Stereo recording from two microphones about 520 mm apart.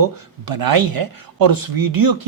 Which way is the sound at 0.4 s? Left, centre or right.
Right.